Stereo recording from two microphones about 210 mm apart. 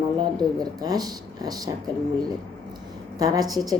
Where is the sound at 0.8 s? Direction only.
20° right (ahead or behind).